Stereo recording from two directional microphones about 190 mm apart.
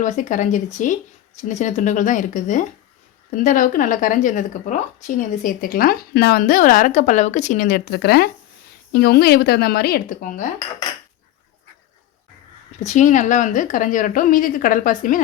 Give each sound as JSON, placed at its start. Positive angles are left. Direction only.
{"t": 0.0, "sound": "speech", "side_deg": 40}
{"t": 12.8, "sound": "speech", "side_deg": 40}